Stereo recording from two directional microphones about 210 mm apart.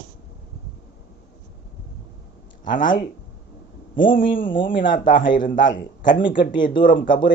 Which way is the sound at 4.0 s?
40° left (ahead or behind).